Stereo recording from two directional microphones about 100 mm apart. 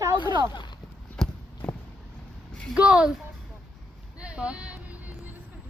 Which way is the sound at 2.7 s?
10° right (ahead or behind).